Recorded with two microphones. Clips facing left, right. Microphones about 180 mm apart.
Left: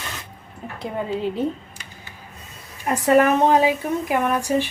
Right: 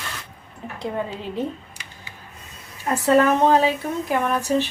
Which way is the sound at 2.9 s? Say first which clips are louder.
Left 1 dB; 15° left (ahead or behind).